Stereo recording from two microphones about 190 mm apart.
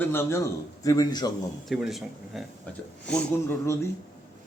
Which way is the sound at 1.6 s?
Centre (ahead or behind).